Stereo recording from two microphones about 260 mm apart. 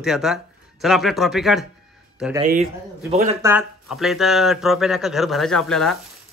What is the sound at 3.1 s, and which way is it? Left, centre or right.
Speech, right.